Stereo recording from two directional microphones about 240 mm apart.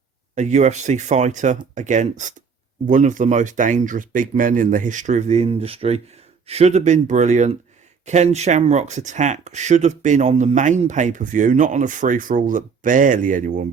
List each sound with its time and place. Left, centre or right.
0.3 s speech: right